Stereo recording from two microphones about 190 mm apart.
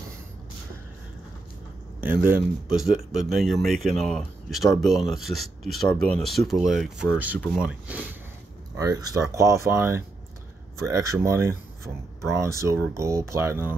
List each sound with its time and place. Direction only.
2.3 s speech: 5° right (ahead or behind)
8.7 s speech: 20° right (ahead or behind)